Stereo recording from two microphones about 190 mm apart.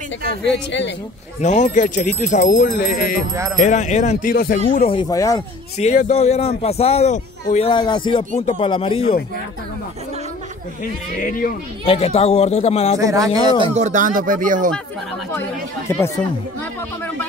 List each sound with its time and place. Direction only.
0.5 s a man's voice: 70° left (ahead or behind)
1.4 s a man's voice: 40° left (ahead or behind)
4.8 s a man's voice: 25° left (ahead or behind)
10.8 s speech: 45° left (ahead or behind)
11.8 s a man's voice: 30° left (ahead or behind)
13.0 s a man's voice: 15° right (ahead or behind)
13.7 s speech: 40° right (ahead or behind)
15.9 s speech: 10° left (ahead or behind)